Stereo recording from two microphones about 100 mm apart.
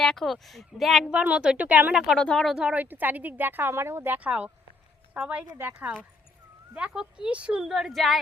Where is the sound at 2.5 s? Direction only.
5° right (ahead or behind).